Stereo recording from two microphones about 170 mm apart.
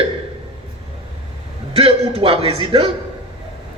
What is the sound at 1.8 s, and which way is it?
Speech, 35° right (ahead or behind).